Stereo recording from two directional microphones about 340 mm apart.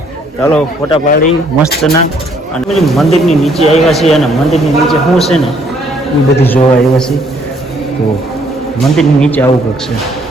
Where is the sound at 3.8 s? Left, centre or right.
Centre.